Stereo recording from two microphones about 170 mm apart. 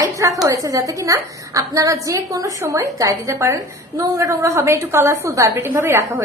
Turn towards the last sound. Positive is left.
turn(degrees=-15)  # may be behind; listen again after turning